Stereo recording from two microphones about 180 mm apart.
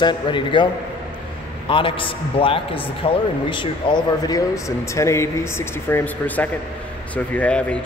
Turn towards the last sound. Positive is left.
turn(degrees=5)  # may be behind; listen again after turning